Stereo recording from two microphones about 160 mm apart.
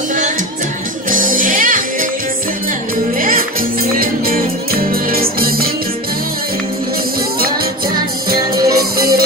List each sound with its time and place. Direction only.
1.1 s music: 60° right (ahead or behind)
3.2 s music: 60° right (ahead or behind)
7.3 s music: 65° right (ahead or behind)